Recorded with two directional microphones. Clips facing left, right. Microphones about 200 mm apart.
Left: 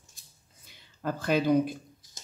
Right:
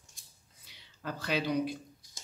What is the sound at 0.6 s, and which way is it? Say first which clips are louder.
Speech: left 7 dB; 50° left (ahead or behind).